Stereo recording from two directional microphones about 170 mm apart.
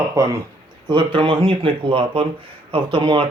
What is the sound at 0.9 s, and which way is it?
Speech, 30° right (ahead or behind).